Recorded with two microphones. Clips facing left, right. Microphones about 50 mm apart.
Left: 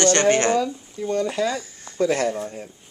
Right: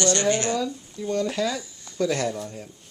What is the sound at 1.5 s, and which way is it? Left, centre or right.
Speech, left.